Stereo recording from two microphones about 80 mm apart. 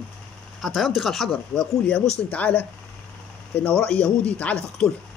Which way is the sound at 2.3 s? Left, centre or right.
Centre.